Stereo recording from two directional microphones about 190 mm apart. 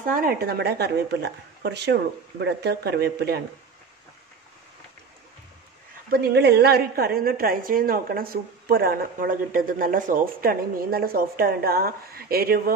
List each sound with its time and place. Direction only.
0.0 s speech: 45° right (ahead or behind)
6.0 s a woman's voice: 55° right (ahead or behind)